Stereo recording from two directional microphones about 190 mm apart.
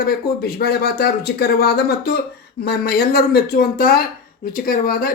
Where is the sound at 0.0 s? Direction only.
55° left (ahead or behind).